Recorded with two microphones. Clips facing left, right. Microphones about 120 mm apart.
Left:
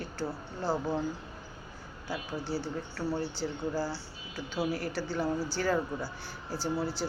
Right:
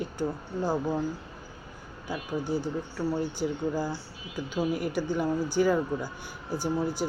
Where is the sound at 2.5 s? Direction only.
20° right (ahead or behind).